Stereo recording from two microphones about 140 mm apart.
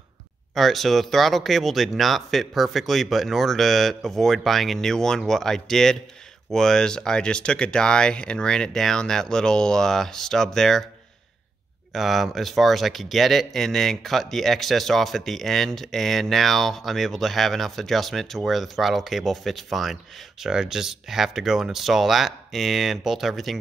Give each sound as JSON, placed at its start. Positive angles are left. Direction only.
{"t": 0.6, "sound": "speech", "side_deg": 0}
{"t": 11.9, "sound": "speech", "side_deg": 0}